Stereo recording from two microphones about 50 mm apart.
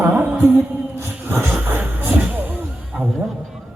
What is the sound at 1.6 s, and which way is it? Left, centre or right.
Music, right.